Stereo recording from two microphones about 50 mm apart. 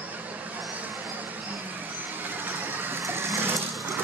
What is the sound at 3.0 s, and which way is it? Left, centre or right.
Vehicle, right.